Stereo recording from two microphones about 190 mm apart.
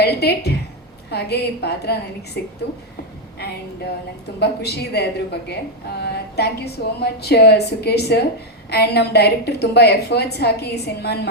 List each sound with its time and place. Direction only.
0.0 s a woman's voice: 60° left (ahead or behind)
4.4 s a woman's voice: 60° left (ahead or behind)